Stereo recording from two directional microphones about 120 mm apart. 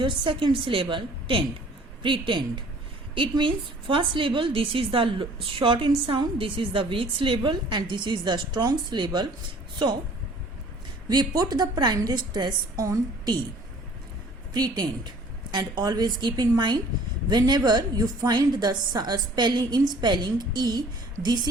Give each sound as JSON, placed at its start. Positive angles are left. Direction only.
{"t": 0.0, "sound": "a woman's voice", "side_deg": -45}
{"t": 11.1, "sound": "a woman's voice", "side_deg": -35}
{"t": 14.5, "sound": "a woman's voice", "side_deg": -35}